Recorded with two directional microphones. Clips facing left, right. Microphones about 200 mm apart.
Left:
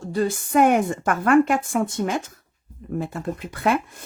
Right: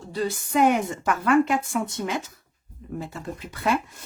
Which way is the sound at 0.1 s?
50° left (ahead or behind).